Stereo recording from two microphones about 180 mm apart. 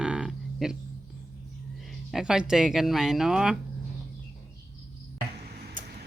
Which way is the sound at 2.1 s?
5° right (ahead or behind).